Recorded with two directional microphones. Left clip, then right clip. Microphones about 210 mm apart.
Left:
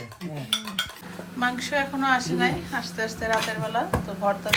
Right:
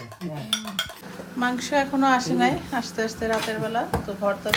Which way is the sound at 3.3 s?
5° right (ahead or behind).